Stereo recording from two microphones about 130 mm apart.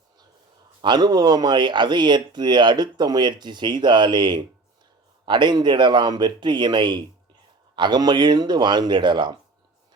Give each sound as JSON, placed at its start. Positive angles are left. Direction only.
{"t": 0.8, "sound": "speech", "side_deg": -35}